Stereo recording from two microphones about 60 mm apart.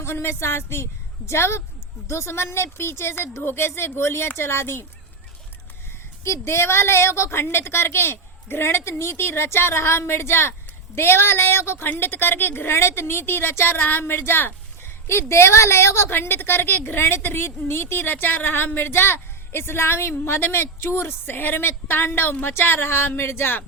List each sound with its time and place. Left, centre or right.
0.0 s a woman's voice: left
6.2 s a woman's voice: left